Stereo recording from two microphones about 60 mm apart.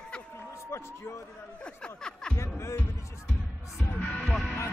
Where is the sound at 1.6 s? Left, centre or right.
Centre.